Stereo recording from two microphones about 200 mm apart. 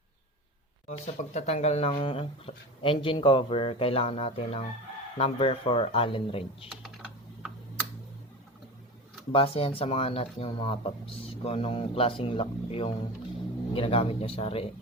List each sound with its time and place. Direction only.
0.9 s speech: 35° left (ahead or behind)
9.3 s speech: 30° left (ahead or behind)